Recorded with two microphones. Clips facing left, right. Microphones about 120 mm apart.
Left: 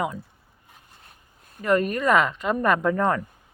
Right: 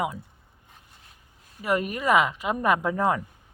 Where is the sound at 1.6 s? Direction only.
10° right (ahead or behind).